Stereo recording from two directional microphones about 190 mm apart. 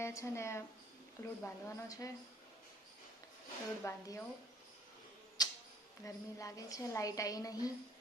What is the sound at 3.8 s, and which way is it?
Speech, 15° left (ahead or behind).